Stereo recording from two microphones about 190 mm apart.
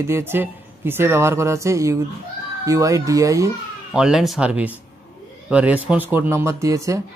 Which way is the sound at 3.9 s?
5° right (ahead or behind).